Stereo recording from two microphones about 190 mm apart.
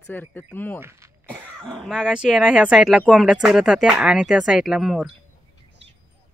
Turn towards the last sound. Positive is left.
turn(degrees=0)  # may be behind; listen again after turning